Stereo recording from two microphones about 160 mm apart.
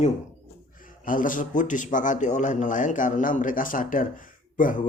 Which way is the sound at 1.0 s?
55° left (ahead or behind).